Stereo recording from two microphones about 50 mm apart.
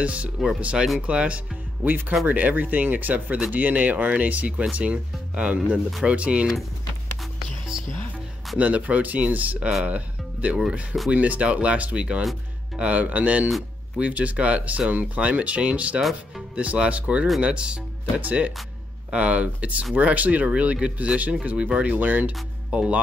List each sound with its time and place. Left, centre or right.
0.0 s speech: right
1.9 s speech: right
8.5 s speech: right
9.8 s music: right
10.7 s speech: right
16.0 s speech: centre
16.5 s speech: right
22.7 s speech: centre